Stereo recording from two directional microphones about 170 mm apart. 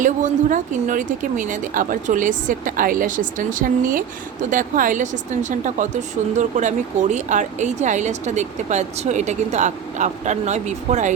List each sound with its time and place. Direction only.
0.0 s speech: 45° right (ahead or behind)